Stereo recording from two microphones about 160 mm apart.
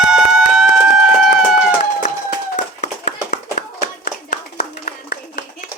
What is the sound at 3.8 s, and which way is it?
Clapping, 55° left (ahead or behind).